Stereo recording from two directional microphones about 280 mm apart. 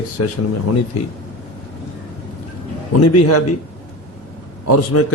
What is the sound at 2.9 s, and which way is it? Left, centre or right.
Speech, left.